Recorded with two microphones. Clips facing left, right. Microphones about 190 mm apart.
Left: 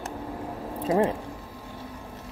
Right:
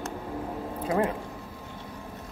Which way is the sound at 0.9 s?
25° left (ahead or behind).